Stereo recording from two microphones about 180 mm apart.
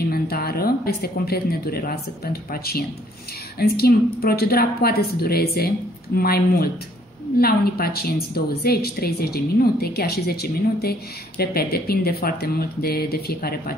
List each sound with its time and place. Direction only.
0.1 s a woman's voice: 60° left (ahead or behind)